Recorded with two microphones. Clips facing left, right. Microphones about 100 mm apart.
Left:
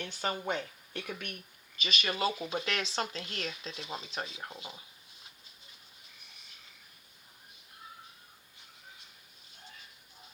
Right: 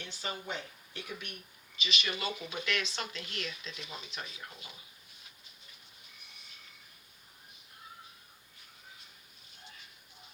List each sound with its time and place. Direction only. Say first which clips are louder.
0.0 s speech: left 6 dB; 50° left (ahead or behind); by 4.8 s 30° left (ahead or behind)